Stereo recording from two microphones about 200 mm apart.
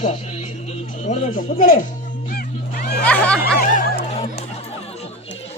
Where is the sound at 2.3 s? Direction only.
50° left (ahead or behind).